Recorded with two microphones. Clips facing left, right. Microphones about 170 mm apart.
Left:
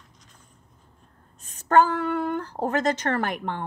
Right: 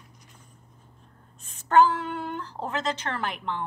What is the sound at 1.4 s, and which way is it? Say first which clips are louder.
A woman's voice: even; 45° left (ahead or behind).